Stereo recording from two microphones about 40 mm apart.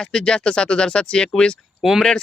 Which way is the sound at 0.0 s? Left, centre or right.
Centre.